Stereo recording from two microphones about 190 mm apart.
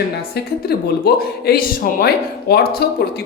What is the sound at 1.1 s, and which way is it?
Speech, 55° left (ahead or behind).